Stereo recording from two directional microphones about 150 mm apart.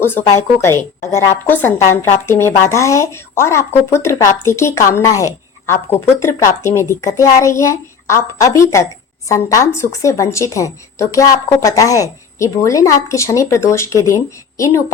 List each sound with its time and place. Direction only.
0.0 s speech: 15° left (ahead or behind)